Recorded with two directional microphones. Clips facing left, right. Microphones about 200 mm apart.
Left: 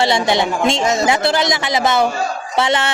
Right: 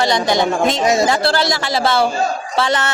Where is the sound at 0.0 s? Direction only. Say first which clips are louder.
Even; 25° left (ahead or behind).